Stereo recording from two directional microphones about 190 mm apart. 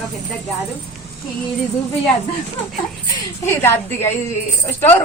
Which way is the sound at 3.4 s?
10° left (ahead or behind).